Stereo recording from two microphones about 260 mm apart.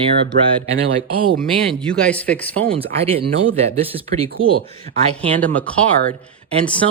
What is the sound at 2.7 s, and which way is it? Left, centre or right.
Speech, right.